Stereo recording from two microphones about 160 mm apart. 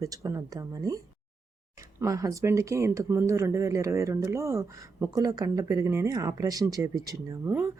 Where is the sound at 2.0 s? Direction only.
20° right (ahead or behind).